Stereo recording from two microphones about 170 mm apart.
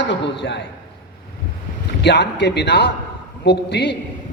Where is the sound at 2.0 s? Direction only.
85° left.